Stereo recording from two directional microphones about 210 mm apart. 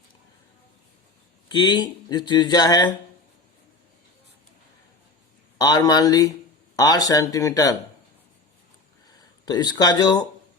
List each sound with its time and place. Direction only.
1.5 s speech: 20° left (ahead or behind)
5.5 s speech: 20° left (ahead or behind)
9.5 s speech: 20° left (ahead or behind)